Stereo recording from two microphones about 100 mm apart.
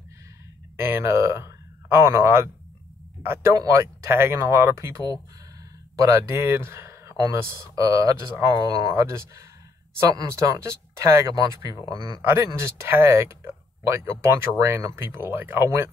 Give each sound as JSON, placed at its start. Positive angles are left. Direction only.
{"t": 0.7, "sound": "speech", "side_deg": -25}
{"t": 6.3, "sound": "speech", "side_deg": -25}
{"t": 10.0, "sound": "speech", "side_deg": -40}
{"t": 12.2, "sound": "speech", "side_deg": -25}